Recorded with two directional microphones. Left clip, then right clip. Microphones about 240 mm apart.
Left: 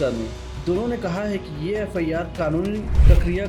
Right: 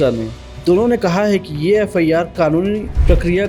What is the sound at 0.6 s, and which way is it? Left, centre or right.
Speech, right.